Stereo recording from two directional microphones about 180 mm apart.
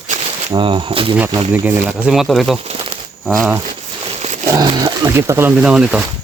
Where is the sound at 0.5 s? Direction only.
30° right (ahead or behind).